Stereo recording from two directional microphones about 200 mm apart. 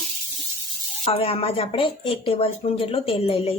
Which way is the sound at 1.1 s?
30° left (ahead or behind).